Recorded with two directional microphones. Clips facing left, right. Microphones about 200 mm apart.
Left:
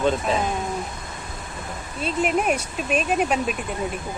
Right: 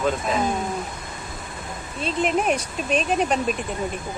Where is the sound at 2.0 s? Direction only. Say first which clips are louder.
Even; 5° left (ahead or behind).